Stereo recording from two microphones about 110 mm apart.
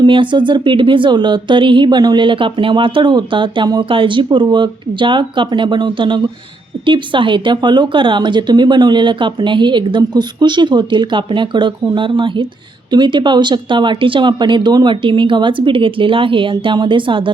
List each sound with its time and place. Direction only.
0.0 s speech: 50° right (ahead or behind)